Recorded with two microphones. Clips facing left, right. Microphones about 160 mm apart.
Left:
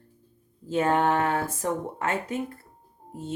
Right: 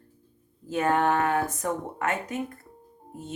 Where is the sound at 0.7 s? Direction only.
25° left (ahead or behind).